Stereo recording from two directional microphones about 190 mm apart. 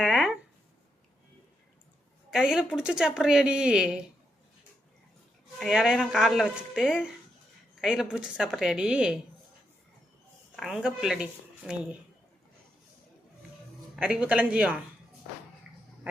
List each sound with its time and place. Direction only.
0.0 s a sound: 5° right (ahead or behind)
2.3 s speech: 5° right (ahead or behind)
5.5 s speech: centre (ahead or behind)
10.6 s speech: centre (ahead or behind)
13.9 s a woman's voice: 5° right (ahead or behind)